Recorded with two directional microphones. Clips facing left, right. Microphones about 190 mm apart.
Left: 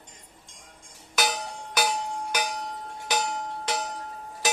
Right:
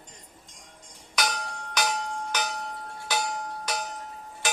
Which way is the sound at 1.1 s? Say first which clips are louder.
Left 2 dB; 5° left (ahead or behind).